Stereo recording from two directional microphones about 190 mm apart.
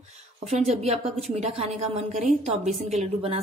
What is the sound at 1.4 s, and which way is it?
A woman's voice, 35° right (ahead or behind).